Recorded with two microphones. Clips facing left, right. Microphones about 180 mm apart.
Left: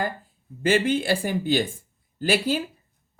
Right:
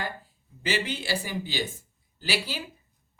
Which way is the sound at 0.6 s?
50° left (ahead or behind).